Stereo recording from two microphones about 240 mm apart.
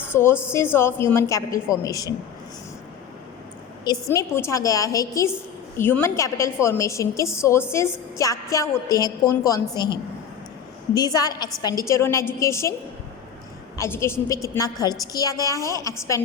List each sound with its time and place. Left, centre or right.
0.1 s a woman's voice: centre
3.8 s a woman's voice: centre
13.7 s a woman's voice: centre